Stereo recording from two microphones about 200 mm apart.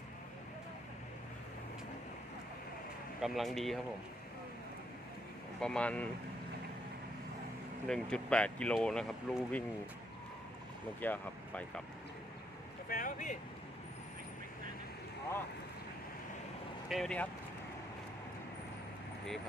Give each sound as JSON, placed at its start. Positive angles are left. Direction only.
{"t": 3.2, "sound": "speech", "side_deg": 0}
{"t": 5.5, "sound": "speech", "side_deg": 5}
{"t": 7.9, "sound": "speech", "side_deg": 5}
{"t": 11.0, "sound": "speech", "side_deg": 10}
{"t": 12.9, "sound": "speech", "side_deg": 45}
{"t": 16.9, "sound": "speech", "side_deg": 5}